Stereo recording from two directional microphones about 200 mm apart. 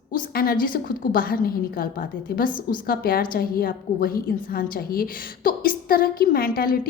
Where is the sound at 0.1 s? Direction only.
45° left (ahead or behind).